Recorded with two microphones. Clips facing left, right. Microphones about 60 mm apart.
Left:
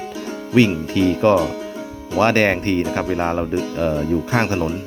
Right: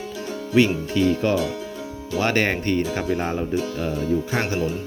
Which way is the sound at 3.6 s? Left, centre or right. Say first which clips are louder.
Left 5 dB; left.